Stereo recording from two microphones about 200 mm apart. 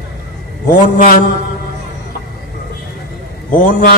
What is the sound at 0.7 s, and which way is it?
Speech, 40° left (ahead or behind).